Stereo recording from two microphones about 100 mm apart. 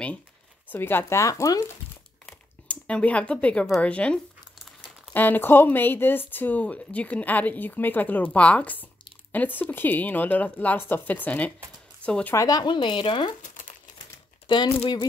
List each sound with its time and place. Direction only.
0.7 s speech: 20° left (ahead or behind)
2.7 s a woman's voice: 15° left (ahead or behind)
12.4 s speech: 40° left (ahead or behind)
14.5 s speech: 50° left (ahead or behind)